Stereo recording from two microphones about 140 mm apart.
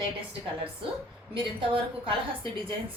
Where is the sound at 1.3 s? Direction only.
40° right (ahead or behind).